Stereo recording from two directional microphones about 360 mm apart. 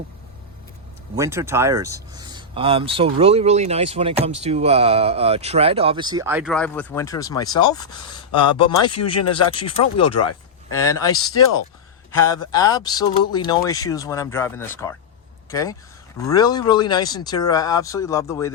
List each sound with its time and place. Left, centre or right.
1.1 s speech: centre